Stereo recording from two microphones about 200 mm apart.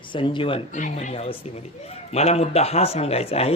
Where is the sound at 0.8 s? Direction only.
40° left (ahead or behind).